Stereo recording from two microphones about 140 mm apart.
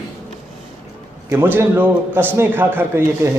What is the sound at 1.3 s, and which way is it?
A man's voice, 15° right (ahead or behind).